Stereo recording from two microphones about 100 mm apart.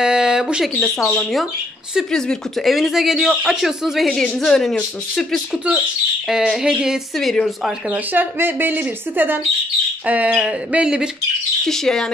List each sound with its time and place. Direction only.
0.0 s a sound: 5° right (ahead or behind)
0.7 s speech: 15° left (ahead or behind)
2.0 s speech: 5° left (ahead or behind)
7.9 s speech: 20° right (ahead or behind)
10.0 s a sound: 15° right (ahead or behind)
11.6 s speech: 5° left (ahead or behind)